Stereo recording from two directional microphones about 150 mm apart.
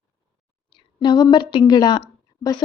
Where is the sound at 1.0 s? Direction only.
30° left (ahead or behind).